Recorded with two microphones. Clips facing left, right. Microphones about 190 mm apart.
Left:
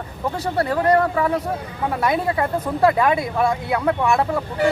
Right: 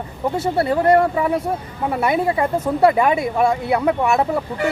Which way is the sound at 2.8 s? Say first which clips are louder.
Right 2 dB; 15° right (ahead or behind).